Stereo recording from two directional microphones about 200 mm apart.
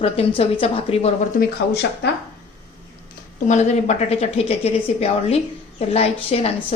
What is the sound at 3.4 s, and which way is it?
A woman's voice, 35° left (ahead or behind).